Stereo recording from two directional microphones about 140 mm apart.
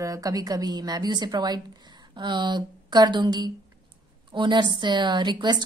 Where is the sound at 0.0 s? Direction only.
25° right (ahead or behind).